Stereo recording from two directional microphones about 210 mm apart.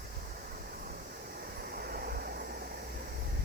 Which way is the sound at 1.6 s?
45° right (ahead or behind).